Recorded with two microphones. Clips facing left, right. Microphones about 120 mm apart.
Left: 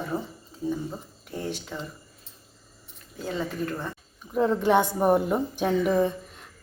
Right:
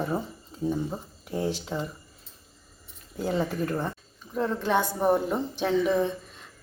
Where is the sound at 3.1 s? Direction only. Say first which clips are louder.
Right 3 dB; 15° right (ahead or behind).